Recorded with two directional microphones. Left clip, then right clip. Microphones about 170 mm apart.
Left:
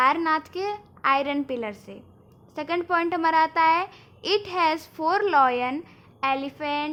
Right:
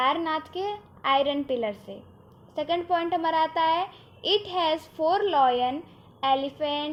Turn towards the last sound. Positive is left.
turn(degrees=30)  # may be behind; listen again after turning